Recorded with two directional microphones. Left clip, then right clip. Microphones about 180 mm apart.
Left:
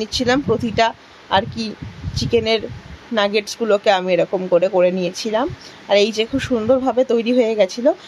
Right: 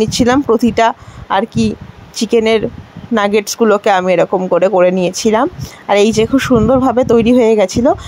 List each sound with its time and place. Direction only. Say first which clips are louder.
0.0 s speech: right 6 dB; 35° right (ahead or behind)